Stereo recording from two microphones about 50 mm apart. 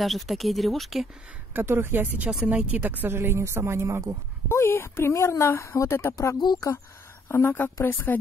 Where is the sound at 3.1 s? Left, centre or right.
Right.